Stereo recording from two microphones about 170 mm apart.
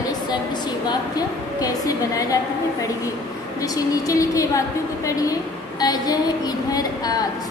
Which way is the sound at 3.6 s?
20° left (ahead or behind).